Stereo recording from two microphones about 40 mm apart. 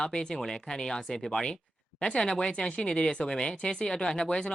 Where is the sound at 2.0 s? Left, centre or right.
Left.